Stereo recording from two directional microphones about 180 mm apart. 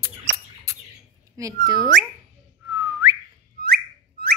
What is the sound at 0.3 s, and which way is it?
Bird, 90° right.